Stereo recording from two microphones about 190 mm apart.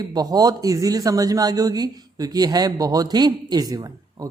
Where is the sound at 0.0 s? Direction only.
20° right (ahead or behind).